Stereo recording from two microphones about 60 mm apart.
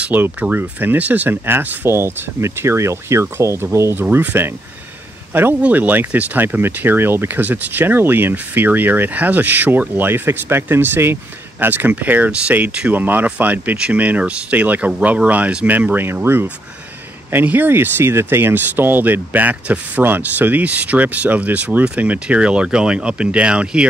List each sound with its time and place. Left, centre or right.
0.0 s speech: right
1.3 s speech: right
1.9 s speech: right
4.2 s speech: right; by 23.9 s centre